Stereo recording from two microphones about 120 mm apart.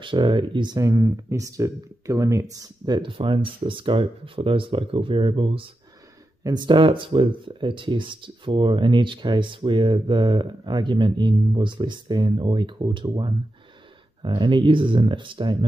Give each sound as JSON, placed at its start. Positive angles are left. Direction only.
{"t": 0.0, "sound": "speech", "side_deg": -40}
{"t": 0.7, "sound": "speech", "side_deg": -30}